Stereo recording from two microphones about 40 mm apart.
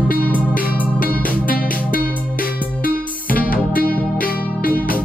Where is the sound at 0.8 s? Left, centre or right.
Left.